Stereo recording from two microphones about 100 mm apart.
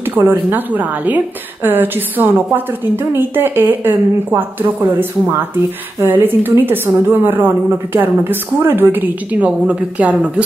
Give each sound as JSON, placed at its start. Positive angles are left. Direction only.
{"t": 0.1, "sound": "a woman's voice", "side_deg": -20}
{"t": 5.9, "sound": "a woman's voice", "side_deg": -20}